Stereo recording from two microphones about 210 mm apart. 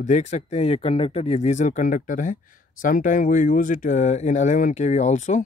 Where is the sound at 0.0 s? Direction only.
35° left (ahead or behind).